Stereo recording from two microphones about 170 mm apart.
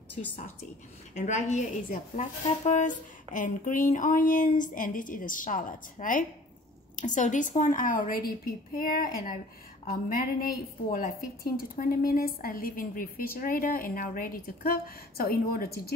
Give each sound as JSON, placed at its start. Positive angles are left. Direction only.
{"t": 0.2, "sound": "a woman's voice", "side_deg": 40}